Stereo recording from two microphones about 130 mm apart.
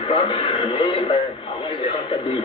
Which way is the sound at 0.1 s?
45° left (ahead or behind).